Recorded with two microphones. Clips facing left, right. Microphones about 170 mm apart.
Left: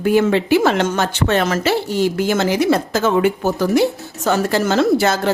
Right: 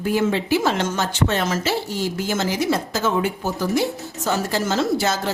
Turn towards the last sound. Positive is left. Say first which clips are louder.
# left 6 dB
turn(degrees=65)  # may be behind; listen again after turning